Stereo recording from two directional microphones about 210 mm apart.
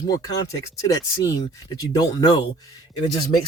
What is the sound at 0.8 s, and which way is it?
Speech, 15° left (ahead or behind).